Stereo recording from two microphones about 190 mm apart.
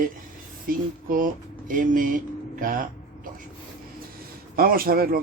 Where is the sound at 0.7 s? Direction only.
50° right (ahead or behind).